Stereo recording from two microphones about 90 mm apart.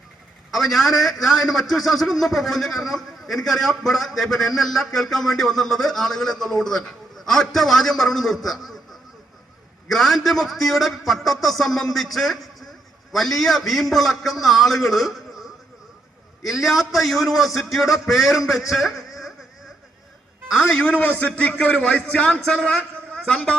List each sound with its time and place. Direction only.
0.5 s a man's voice: centre (ahead or behind)
9.9 s a man's voice: centre (ahead or behind)
20.6 s a man's voice: 5° left (ahead or behind)
20.8 s a man's voice: 15° left (ahead or behind)